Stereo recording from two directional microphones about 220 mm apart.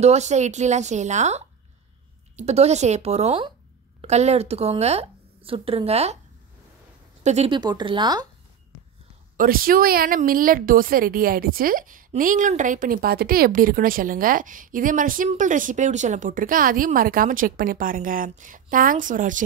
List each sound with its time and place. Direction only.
0.0 s a woman's voice: 30° right (ahead or behind)
7.2 s speech: 25° right (ahead or behind)
9.4 s a woman's voice: 40° right (ahead or behind)